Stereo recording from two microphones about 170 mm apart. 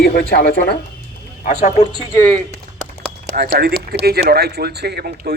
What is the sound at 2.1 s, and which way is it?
Speech, 10° left (ahead or behind).